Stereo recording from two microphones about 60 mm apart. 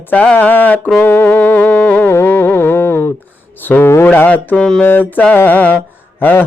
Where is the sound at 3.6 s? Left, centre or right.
Left.